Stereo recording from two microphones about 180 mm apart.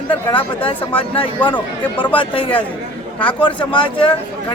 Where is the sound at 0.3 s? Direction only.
25° left (ahead or behind).